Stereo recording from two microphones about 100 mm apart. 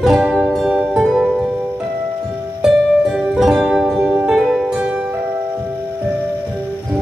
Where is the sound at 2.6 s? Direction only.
5° right (ahead or behind).